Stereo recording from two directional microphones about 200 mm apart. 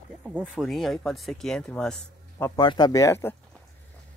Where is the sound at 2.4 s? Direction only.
20° left (ahead or behind).